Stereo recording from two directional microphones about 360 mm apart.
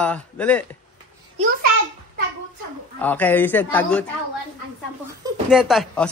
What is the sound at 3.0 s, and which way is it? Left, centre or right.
Speech, centre.